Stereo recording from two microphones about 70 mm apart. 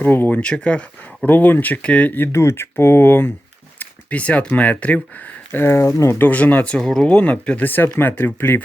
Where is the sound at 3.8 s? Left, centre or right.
Left.